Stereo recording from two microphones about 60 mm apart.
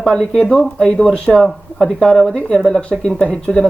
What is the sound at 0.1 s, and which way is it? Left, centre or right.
Speech, centre.